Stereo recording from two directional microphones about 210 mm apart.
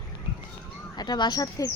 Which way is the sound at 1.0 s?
20° left (ahead or behind).